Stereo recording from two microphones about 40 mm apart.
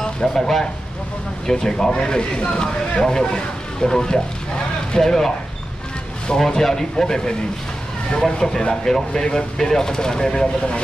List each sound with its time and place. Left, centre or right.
0.0 s speech: centre